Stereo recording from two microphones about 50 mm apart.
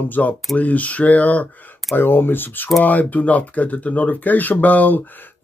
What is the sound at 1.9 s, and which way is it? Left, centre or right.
Speech, left.